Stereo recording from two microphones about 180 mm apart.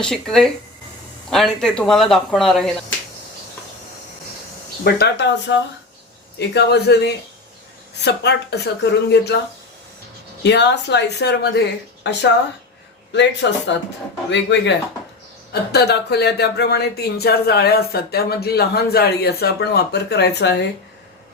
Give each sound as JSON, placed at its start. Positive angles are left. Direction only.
{"t": 0.0, "sound": "speech", "side_deg": 5}
{"t": 4.8, "sound": "speech", "side_deg": 60}
{"t": 10.4, "sound": "speech", "side_deg": 70}
{"t": 13.1, "sound": "speech", "side_deg": 80}
{"t": 15.7, "sound": "speech", "side_deg": 65}